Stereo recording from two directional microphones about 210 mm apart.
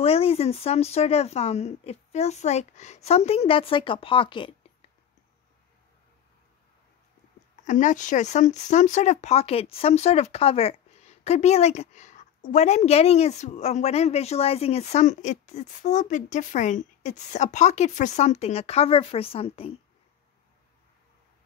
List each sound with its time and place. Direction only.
0.0 s speech: 30° left (ahead or behind)
7.6 s speech: 35° left (ahead or behind)